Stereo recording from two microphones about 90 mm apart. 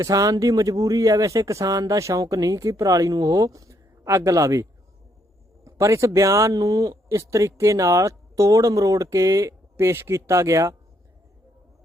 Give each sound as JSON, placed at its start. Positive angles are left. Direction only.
{"t": 0.0, "sound": "speech", "side_deg": -40}
{"t": 5.6, "sound": "speech", "side_deg": -35}